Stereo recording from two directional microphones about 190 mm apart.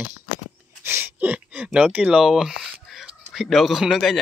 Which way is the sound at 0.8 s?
10° right (ahead or behind).